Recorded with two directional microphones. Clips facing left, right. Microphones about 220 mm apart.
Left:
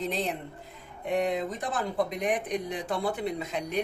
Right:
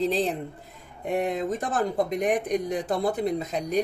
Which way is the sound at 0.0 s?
35° right (ahead or behind).